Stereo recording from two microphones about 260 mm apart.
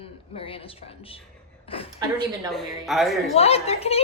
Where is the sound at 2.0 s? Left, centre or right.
Centre.